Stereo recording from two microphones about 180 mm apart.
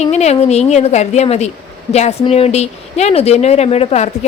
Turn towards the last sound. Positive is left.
turn(degrees=35)  # may be behind; listen again after turning